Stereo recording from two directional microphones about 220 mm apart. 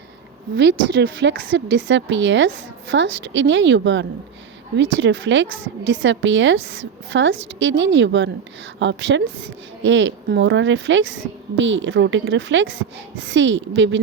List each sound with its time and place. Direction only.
0.5 s a woman's voice: 55° right (ahead or behind)